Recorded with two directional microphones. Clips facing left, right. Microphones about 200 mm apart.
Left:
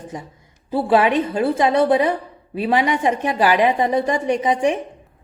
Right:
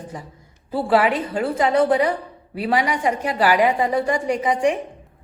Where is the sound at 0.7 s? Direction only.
25° left (ahead or behind).